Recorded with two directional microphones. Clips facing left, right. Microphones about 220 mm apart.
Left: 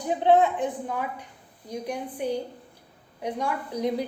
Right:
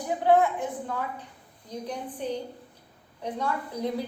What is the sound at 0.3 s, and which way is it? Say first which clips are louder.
A woman's voice: left 2 dB; 20° left (ahead or behind).